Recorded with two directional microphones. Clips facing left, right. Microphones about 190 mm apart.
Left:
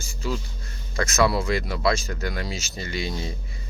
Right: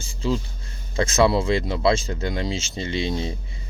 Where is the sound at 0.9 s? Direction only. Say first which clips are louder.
Right 3 dB; 30° right (ahead or behind).